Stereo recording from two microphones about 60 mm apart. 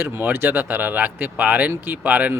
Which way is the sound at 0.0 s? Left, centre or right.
Right.